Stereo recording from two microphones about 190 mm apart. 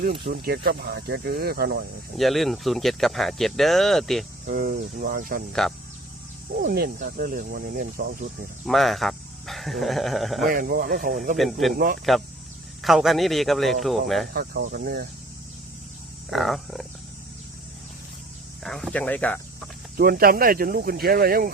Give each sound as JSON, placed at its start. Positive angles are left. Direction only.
{"t": 0.3, "sound": "speech", "side_deg": -55}
{"t": 2.1, "sound": "speech", "side_deg": 0}
{"t": 4.4, "sound": "speech", "side_deg": -50}
{"t": 5.6, "sound": "speech", "side_deg": 0}
{"t": 6.6, "sound": "speech", "side_deg": -50}
{"t": 8.6, "sound": "speech", "side_deg": 0}
{"t": 10.5, "sound": "speech", "side_deg": -50}
{"t": 11.6, "sound": "speech", "side_deg": 0}
{"t": 14.3, "sound": "speech", "side_deg": -50}
{"t": 16.3, "sound": "speech", "side_deg": 0}
{"t": 18.6, "sound": "speech", "side_deg": 0}
{"t": 20.0, "sound": "speech", "side_deg": -50}